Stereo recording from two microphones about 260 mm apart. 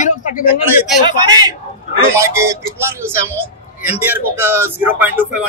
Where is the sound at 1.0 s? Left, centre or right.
Centre.